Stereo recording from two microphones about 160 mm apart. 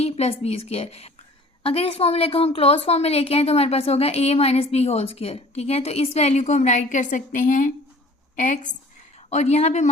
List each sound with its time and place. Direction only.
0.0 s a woman's voice: 40° left (ahead or behind)